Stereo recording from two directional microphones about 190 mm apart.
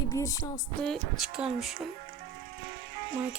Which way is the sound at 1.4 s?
Centre (ahead or behind).